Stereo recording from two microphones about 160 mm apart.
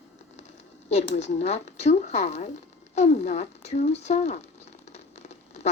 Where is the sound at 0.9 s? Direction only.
45° left (ahead or behind).